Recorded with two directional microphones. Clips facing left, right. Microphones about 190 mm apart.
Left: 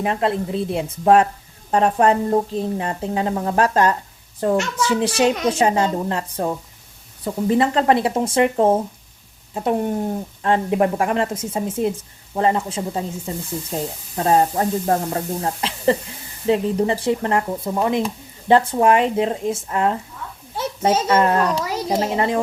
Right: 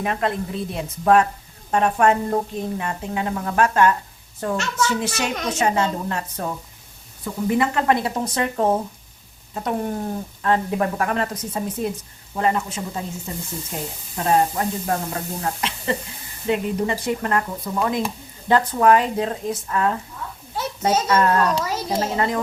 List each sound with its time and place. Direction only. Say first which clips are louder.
0.0 s a woman's voice: left 3 dB; 30° left (ahead or behind)
10.4 s a woman's voice: left 3 dB; 25° left (ahead or behind)